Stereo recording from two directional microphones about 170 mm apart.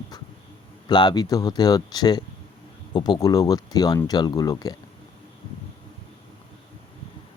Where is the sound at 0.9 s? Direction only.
25° left (ahead or behind).